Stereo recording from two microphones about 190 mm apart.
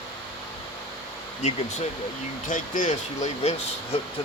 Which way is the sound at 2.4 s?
45° left (ahead or behind).